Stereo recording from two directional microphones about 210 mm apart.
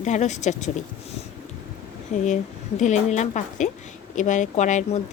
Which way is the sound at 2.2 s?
35° left (ahead or behind).